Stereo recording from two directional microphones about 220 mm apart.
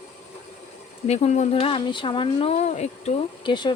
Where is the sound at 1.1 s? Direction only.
30° left (ahead or behind).